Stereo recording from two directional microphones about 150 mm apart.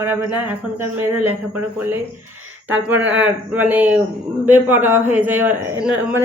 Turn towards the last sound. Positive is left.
turn(degrees=-10)  # may be behind; listen again after turning